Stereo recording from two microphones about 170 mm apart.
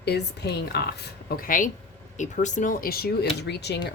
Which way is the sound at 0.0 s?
75° left (ahead or behind).